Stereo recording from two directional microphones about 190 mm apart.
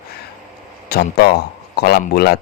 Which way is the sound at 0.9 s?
55° left (ahead or behind).